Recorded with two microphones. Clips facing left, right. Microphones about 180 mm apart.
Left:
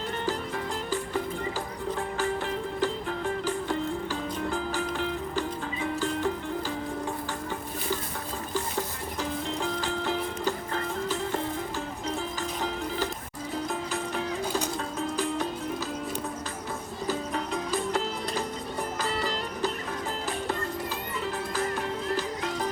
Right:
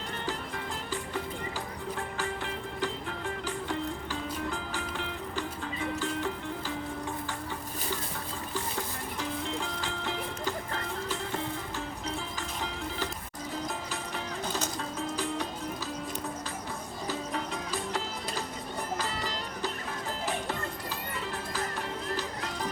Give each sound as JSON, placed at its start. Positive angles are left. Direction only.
{"t": 2.1, "sound": "music", "side_deg": 45}
{"t": 9.8, "sound": "music", "side_deg": 40}